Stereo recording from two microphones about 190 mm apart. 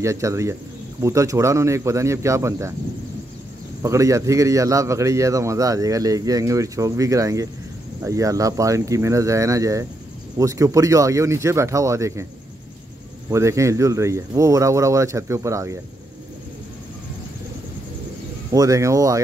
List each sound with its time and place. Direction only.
0.0 s a man's voice: 15° right (ahead or behind)
3.8 s a man's voice: 15° right (ahead or behind)
13.3 s a man's voice: 15° right (ahead or behind)
18.5 s a man's voice: 15° right (ahead or behind)